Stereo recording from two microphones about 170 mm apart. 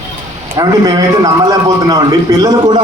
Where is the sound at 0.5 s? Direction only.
20° right (ahead or behind).